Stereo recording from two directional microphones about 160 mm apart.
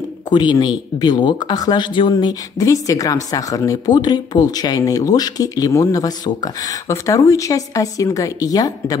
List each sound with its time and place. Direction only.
0.3 s speech: 25° left (ahead or behind)